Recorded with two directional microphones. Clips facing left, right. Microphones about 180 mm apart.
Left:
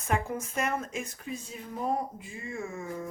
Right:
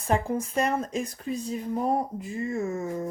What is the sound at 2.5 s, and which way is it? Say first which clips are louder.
Speech: right 4 dB; 40° right (ahead or behind).